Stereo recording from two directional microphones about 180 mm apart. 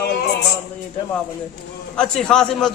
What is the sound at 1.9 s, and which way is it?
Speech, 5° left (ahead or behind).